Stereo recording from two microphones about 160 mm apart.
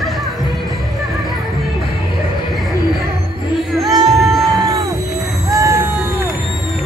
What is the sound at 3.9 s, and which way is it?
Music, 25° right (ahead or behind).